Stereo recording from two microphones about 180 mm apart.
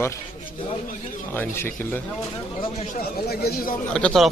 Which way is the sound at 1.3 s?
10° left (ahead or behind).